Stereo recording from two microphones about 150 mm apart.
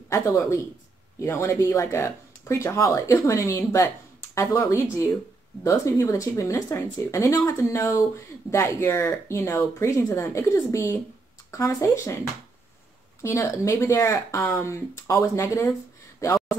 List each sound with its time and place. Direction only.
0.1 s speech: 20° left (ahead or behind)
13.2 s speech: 20° left (ahead or behind)